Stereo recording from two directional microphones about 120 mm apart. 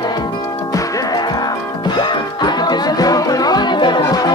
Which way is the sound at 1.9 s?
35° left (ahead or behind).